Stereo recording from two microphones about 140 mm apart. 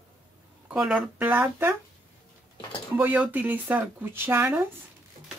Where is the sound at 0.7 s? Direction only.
5° right (ahead or behind).